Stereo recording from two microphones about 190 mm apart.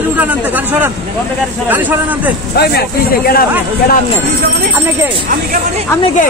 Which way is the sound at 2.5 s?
55° left (ahead or behind).